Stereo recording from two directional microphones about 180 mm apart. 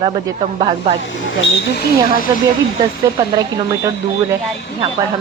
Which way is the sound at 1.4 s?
60° left (ahead or behind).